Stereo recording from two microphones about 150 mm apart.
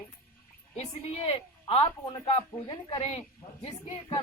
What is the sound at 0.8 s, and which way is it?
Speech, 40° left (ahead or behind).